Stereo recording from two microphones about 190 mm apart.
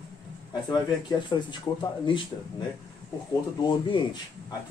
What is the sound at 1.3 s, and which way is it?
Speech, 25° left (ahead or behind).